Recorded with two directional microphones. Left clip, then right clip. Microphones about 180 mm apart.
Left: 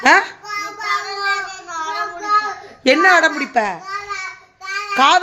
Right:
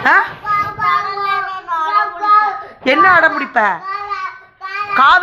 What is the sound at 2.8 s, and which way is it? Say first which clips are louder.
Speech: right 2 dB; 30° left (ahead or behind).